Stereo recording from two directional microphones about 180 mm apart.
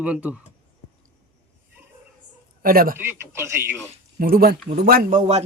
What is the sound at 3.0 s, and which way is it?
Speech, 10° right (ahead or behind).